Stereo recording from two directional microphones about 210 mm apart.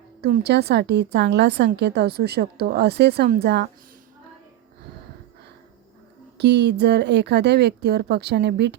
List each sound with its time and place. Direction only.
0.2 s a woman's voice: 45° right (ahead or behind)
6.3 s a woman's voice: 55° right (ahead or behind)